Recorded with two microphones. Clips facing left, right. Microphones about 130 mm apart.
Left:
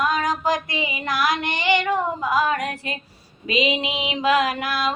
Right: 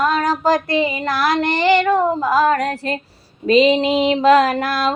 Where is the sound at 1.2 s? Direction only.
35° right (ahead or behind).